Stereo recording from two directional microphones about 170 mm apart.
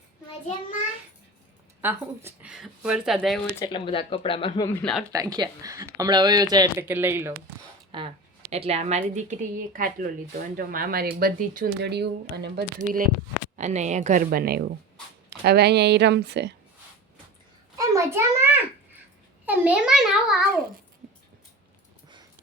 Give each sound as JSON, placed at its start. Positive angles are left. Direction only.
{"t": 1.8, "sound": "speech", "side_deg": -15}
{"t": 3.7, "sound": "speech", "side_deg": 30}
{"t": 4.8, "sound": "a child's voice", "side_deg": 5}
{"t": 5.1, "sound": "speech", "side_deg": -20}
{"t": 6.8, "sound": "speech", "side_deg": -10}
{"t": 7.9, "sound": "a woman's voice", "side_deg": -35}
{"t": 12.8, "sound": "speech", "side_deg": -55}
{"t": 13.6, "sound": "a woman's voice", "side_deg": -45}
{"t": 15.3, "sound": "speech", "side_deg": -75}
{"t": 17.7, "sound": "a sound", "side_deg": -15}
{"t": 19.5, "sound": "a child's voice", "side_deg": -10}